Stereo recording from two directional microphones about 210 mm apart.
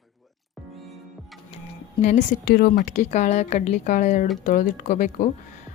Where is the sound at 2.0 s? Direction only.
35° left (ahead or behind).